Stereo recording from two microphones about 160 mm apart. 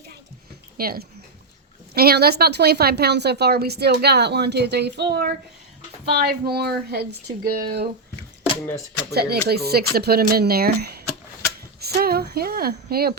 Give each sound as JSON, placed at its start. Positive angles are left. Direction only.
{"t": 0.8, "sound": "a woman's voice", "side_deg": -70}
{"t": 9.1, "sound": "speech", "side_deg": -85}